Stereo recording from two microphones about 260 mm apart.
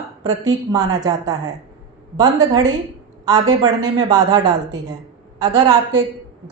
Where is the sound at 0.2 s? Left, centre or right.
Centre.